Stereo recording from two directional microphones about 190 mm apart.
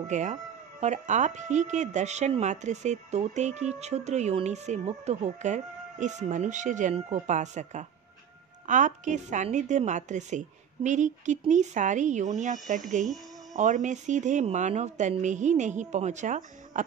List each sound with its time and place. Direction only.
0.1 s speech: 40° right (ahead or behind)
13.6 s speech: 40° right (ahead or behind)